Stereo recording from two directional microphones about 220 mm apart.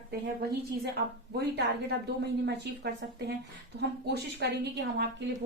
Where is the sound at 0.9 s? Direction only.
45° right (ahead or behind).